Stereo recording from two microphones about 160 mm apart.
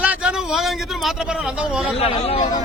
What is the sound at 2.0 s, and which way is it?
Speech, 35° left (ahead or behind).